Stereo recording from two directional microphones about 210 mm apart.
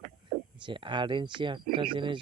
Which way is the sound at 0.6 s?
25° right (ahead or behind).